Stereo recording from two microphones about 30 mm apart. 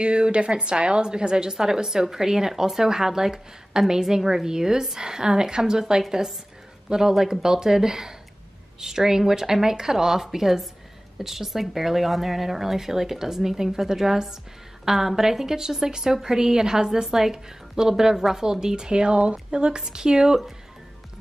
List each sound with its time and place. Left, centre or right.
0.0 s a woman's voice: right
6.0 s speech: centre
6.9 s a woman's voice: centre